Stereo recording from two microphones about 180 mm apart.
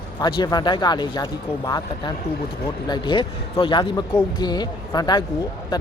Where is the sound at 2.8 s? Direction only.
25° left (ahead or behind).